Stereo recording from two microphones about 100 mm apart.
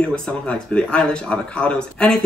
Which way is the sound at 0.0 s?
10° left (ahead or behind).